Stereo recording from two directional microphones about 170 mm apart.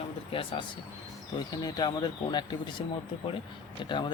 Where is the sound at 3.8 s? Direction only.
25° left (ahead or behind).